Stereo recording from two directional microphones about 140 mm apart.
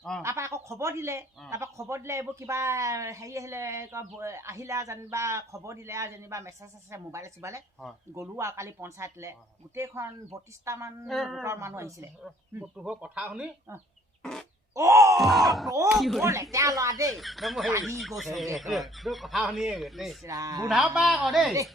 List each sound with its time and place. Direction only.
0.2 s speech: 20° right (ahead or behind)
11.0 s speech: centre (ahead or behind)
11.4 s speech: 20° right (ahead or behind)
12.5 s speech: 5° right (ahead or behind)
14.2 s a sound: 5° left (ahead or behind)
14.8 s groan: 20° right (ahead or behind)
15.2 s speech: centre (ahead or behind)
16.2 s speech: 20° right (ahead or behind)
17.2 s speech: centre (ahead or behind)
20.2 s speech: 25° right (ahead or behind)
20.7 s speech: 5° right (ahead or behind)